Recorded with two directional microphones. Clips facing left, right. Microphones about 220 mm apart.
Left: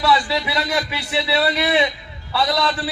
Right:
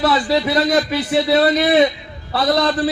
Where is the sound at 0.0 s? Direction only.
40° right (ahead or behind).